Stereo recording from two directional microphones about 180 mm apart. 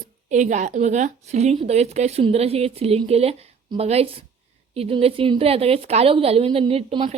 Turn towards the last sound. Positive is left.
turn(degrees=-30)  # may be behind; listen again after turning